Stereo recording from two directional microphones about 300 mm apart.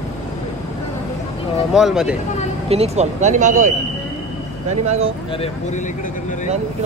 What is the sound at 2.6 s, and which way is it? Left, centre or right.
Speech, centre.